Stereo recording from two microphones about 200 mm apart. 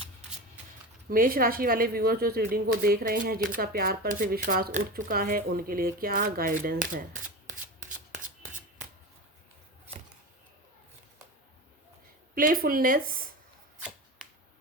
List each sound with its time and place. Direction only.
1.1 s speech: 45° right (ahead or behind)
12.3 s speech: 45° right (ahead or behind)